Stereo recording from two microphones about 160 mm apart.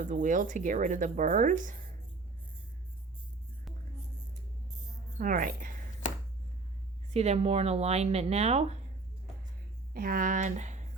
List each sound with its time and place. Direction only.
0.0 s speech: 55° right (ahead or behind)
5.1 s a woman's voice: 55° right (ahead or behind)
7.1 s speech: 40° right (ahead or behind)
9.9 s speech: 65° right (ahead or behind); by 10.8 s 50° right (ahead or behind)